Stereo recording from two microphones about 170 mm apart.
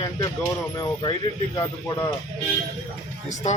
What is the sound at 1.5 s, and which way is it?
Speech, 20° left (ahead or behind).